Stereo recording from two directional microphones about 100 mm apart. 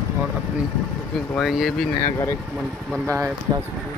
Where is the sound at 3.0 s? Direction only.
30° right (ahead or behind).